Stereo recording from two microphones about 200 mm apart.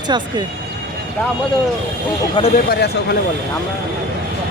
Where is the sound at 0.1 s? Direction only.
20° right (ahead or behind).